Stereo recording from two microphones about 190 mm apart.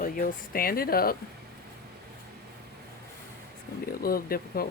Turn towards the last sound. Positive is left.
turn(degrees=50)  # may be behind; listen again after turning